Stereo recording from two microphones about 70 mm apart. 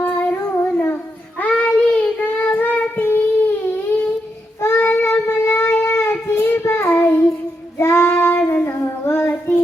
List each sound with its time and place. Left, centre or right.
0.0 s humming: left
1.4 s child singing: centre; by 9.3 s left